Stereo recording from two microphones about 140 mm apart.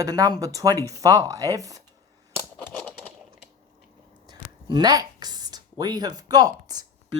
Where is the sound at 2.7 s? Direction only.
10° left (ahead or behind).